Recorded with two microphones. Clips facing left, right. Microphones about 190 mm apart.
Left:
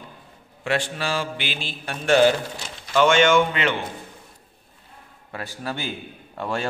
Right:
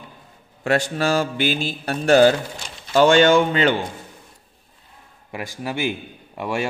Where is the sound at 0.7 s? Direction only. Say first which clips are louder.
Right 5 dB; 40° right (ahead or behind).